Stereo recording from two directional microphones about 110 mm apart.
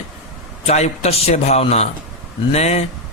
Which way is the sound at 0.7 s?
80° left.